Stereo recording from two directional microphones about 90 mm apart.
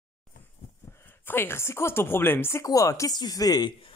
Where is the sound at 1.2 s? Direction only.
25° left (ahead or behind).